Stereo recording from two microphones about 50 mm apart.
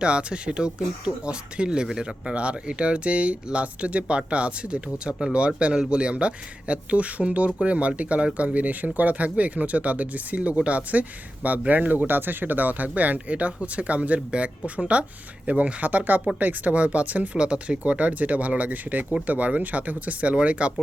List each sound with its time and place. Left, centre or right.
0.0 s speech: right